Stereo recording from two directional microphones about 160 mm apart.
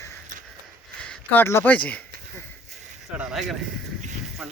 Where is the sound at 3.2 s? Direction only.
Centre (ahead or behind).